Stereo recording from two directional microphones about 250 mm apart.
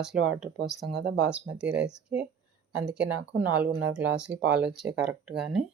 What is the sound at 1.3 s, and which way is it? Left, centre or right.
Speech, centre.